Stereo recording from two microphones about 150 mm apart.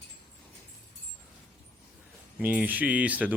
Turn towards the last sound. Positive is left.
turn(degrees=-10)  # may be behind; listen again after turning